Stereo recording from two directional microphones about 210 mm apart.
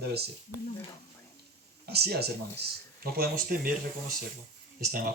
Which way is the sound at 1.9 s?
50° right (ahead or behind).